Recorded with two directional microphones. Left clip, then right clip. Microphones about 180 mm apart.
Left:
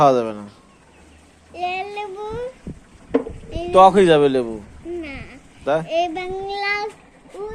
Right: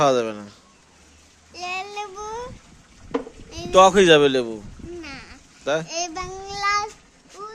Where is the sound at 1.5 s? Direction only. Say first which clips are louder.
Left 5 dB; 20° right (ahead or behind).